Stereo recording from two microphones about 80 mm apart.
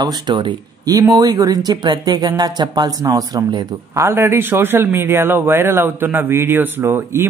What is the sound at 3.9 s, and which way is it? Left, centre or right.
A man's voice, right.